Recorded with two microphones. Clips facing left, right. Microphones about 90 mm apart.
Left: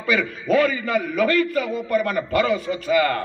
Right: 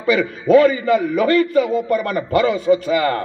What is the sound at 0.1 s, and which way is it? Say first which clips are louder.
A man's voice: right 7 dB; 30° right (ahead or behind).